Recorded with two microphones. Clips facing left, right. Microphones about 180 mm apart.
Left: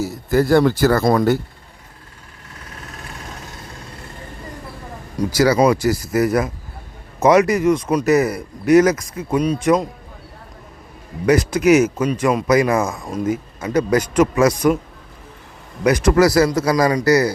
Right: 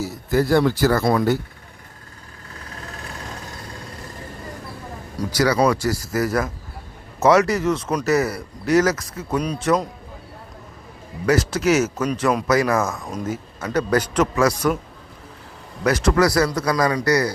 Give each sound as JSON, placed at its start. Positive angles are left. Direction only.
{"t": 0.0, "sound": "speech", "side_deg": 50}
{"t": 5.5, "sound": "a man's voice", "side_deg": 15}
{"t": 11.3, "sound": "a man's voice", "side_deg": 15}
{"t": 15.8, "sound": "a man's voice", "side_deg": 15}